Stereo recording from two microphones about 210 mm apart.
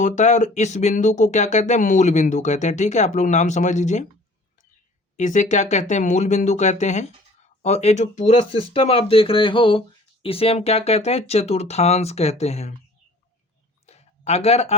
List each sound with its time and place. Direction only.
0.0 s speech: 35° left (ahead or behind)
5.1 s speech: 35° left (ahead or behind)
13.8 s a sound: 30° left (ahead or behind)